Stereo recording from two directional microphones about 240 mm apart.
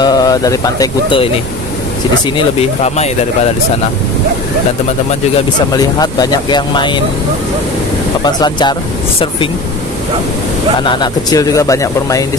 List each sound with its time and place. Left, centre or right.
0.0 s speech: centre
2.3 s speech: left
5.7 s speech: centre
8.2 s speech: centre
10.8 s speech: centre